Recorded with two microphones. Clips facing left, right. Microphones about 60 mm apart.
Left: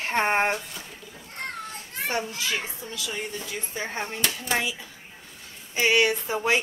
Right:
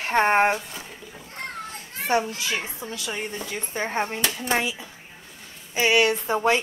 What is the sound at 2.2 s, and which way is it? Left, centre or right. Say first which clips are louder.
Speech: right 1 dB; centre.